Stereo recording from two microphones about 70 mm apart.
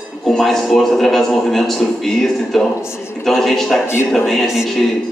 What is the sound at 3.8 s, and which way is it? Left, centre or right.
Speech, left.